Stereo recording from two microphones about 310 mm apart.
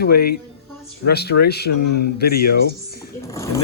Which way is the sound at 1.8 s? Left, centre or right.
Left.